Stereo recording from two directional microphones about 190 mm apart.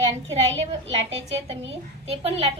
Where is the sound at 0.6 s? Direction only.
30° right (ahead or behind).